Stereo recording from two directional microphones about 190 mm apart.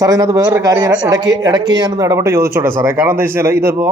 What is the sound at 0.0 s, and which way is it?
A woman's voice, 20° right (ahead or behind).